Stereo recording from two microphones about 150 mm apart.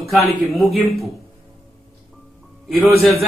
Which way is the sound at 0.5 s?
Centre (ahead or behind).